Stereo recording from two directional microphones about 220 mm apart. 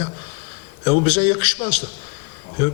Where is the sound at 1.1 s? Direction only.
15° left (ahead or behind).